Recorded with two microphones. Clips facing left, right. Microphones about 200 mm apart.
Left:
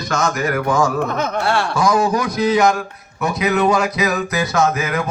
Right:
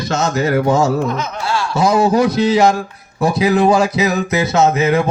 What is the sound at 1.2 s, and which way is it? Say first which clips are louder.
Speech: left 2 dB; 60° left (ahead or behind).